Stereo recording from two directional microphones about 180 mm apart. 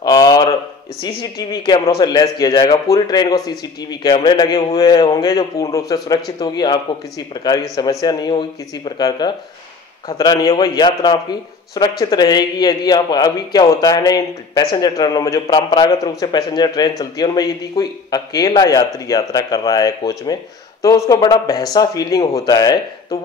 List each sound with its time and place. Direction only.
0.0 s a sound: 20° left (ahead or behind)
1.0 s a man's voice: 25° left (ahead or behind)
8.0 s a man's voice: 20° left (ahead or behind)